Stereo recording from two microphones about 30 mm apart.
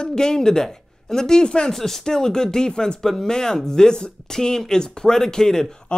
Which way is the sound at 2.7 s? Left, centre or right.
Left.